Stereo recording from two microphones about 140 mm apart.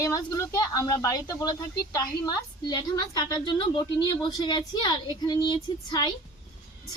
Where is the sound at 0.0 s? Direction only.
25° left (ahead or behind).